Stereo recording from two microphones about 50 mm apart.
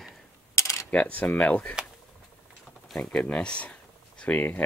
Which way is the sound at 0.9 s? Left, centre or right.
Left.